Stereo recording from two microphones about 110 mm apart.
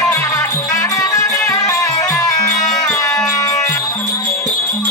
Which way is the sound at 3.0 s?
25° left (ahead or behind).